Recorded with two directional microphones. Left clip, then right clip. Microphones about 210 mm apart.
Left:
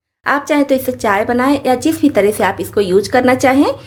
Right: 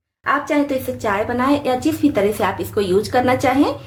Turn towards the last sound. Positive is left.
turn(degrees=40)  # may be behind; listen again after turning